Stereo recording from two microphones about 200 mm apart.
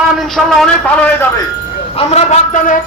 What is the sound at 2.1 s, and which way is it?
Speech, 35° left (ahead or behind).